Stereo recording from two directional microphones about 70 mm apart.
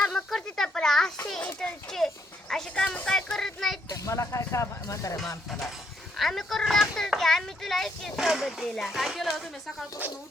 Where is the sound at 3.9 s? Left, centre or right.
Left.